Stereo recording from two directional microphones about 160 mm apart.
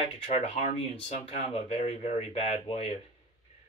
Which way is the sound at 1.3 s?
40° left (ahead or behind).